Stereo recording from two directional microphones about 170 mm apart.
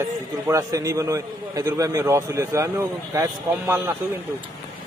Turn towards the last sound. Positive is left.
turn(degrees=-15)  # may be behind; listen again after turning